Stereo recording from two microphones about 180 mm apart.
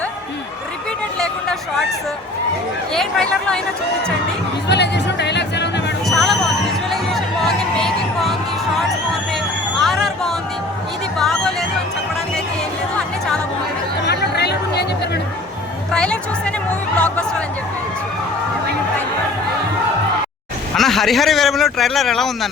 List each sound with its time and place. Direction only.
1.2 s a sound: 5° left (ahead or behind)
2.9 s speech: 5° left (ahead or behind)
4.7 s music: 70° left (ahead or behind)
6.1 s hubbub: centre (ahead or behind)
6.9 s music: centre (ahead or behind)
9.8 s hubbub: centre (ahead or behind)
11.2 s music: centre (ahead or behind)
14.1 s music: 65° left (ahead or behind)
15.9 s music: 5° left (ahead or behind)
20.7 s a man's voice: centre (ahead or behind)